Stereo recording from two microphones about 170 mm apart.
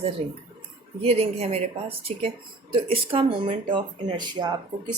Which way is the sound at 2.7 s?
35° right (ahead or behind).